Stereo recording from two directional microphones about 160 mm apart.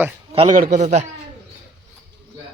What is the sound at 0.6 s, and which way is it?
Speech, 50° right (ahead or behind).